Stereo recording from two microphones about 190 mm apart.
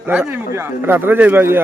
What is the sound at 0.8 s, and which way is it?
Speech, 10° right (ahead or behind).